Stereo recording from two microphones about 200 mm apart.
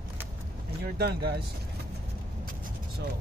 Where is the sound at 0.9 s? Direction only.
55° right (ahead or behind).